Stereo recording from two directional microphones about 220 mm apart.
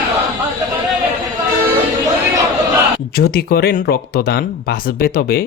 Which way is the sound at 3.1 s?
45° left (ahead or behind).